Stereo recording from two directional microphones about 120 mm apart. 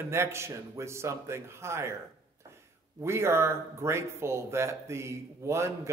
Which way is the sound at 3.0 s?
20° right (ahead or behind).